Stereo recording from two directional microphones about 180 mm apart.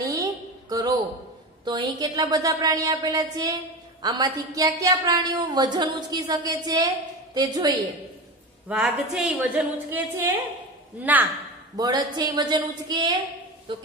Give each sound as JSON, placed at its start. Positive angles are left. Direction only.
{"t": 0.0, "sound": "a sound", "side_deg": -20}
{"t": 1.6, "sound": "a woman's voice", "side_deg": -25}
{"t": 8.6, "sound": "a woman's voice", "side_deg": -5}
{"t": 11.7, "sound": "a woman's voice", "side_deg": -20}